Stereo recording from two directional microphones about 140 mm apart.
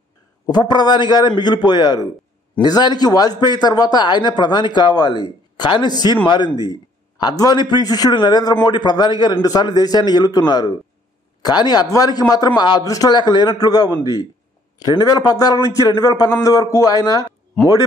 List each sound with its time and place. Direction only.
0.5 s speech: 30° left (ahead or behind)